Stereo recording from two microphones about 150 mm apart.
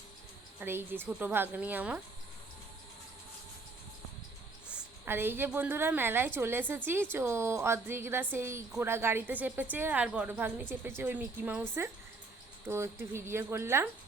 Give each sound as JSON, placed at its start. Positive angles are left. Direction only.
{"t": 0.6, "sound": "a woman's voice", "side_deg": -15}
{"t": 5.0, "sound": "a woman's voice", "side_deg": -15}
{"t": 12.6, "sound": "a woman's voice", "side_deg": -15}